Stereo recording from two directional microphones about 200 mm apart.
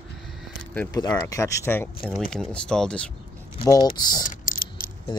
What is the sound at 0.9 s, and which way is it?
Speech, 20° left (ahead or behind).